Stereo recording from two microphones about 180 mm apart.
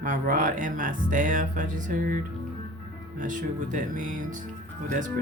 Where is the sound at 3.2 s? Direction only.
45° right (ahead or behind).